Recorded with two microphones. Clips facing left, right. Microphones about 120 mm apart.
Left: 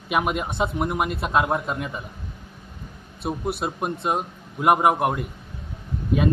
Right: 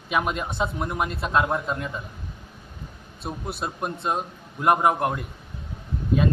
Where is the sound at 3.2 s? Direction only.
10° left (ahead or behind).